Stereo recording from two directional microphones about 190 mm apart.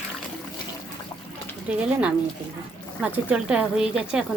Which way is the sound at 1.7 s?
5° right (ahead or behind).